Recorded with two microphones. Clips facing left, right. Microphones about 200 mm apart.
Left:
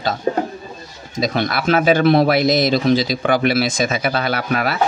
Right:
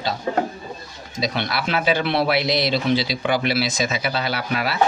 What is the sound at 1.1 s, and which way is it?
Speech, 45° left (ahead or behind).